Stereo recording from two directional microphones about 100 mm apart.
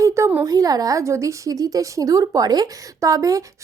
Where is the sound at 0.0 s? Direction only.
30° right (ahead or behind).